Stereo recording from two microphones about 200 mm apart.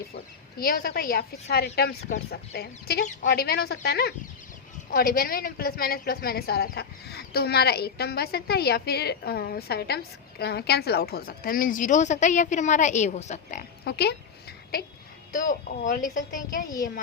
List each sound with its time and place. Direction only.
0.6 s a woman's voice: 50° left (ahead or behind)
13.8 s speech: 55° left (ahead or behind)
15.3 s speech: 40° left (ahead or behind)